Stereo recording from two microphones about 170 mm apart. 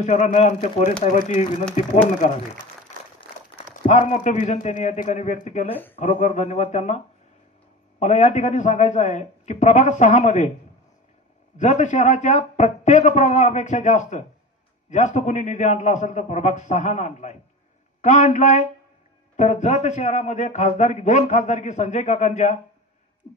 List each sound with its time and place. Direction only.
0.0 s a man's voice: 40° left (ahead or behind)
3.8 s a man's voice: 45° left (ahead or behind)
8.0 s a man's voice: 45° left (ahead or behind)
11.5 s a man's voice: 45° left (ahead or behind)
23.2 s a sound: 50° left (ahead or behind)